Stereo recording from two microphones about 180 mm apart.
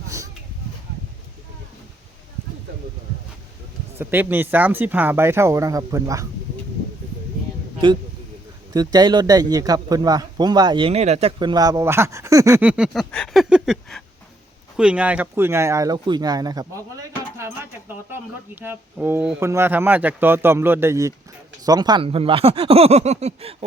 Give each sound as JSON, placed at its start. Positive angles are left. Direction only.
{"t": 3.9, "sound": "speech", "side_deg": -10}
{"t": 7.8, "sound": "a man's voice", "side_deg": -25}